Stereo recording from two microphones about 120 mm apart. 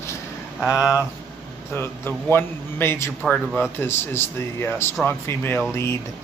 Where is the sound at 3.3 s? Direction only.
Centre (ahead or behind).